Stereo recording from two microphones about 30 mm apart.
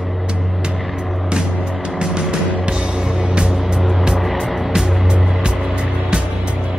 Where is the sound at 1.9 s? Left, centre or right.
Right.